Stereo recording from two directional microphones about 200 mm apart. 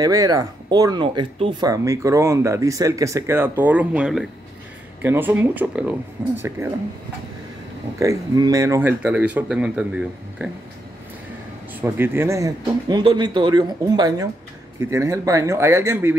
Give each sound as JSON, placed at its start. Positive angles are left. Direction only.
{"t": 0.0, "sound": "speech", "side_deg": -15}
{"t": 8.0, "sound": "speech", "side_deg": -15}
{"t": 11.8, "sound": "speech", "side_deg": -10}